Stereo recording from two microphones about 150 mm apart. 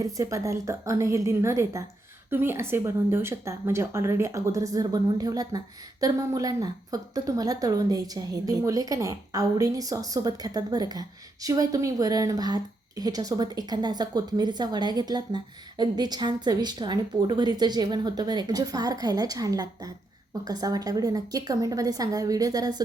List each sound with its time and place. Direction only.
0.0 s a woman's voice: 20° right (ahead or behind)